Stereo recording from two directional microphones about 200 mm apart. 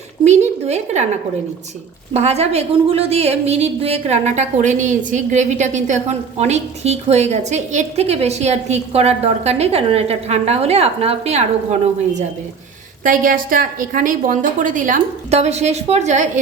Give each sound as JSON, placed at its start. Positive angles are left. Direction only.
{"t": 0.3, "sound": "a woman's voice", "side_deg": -35}
{"t": 2.1, "sound": "a woman's voice", "side_deg": -30}
{"t": 13.1, "sound": "a woman's voice", "side_deg": -45}